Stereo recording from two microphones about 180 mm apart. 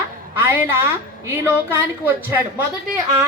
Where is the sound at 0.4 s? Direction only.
10° right (ahead or behind).